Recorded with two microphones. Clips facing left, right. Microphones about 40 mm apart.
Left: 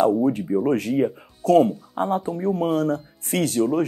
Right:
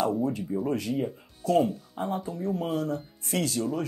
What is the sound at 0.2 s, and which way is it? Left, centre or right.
Speech, left.